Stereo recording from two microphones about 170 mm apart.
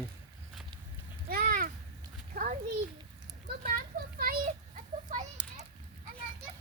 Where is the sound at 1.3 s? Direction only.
60° right (ahead or behind).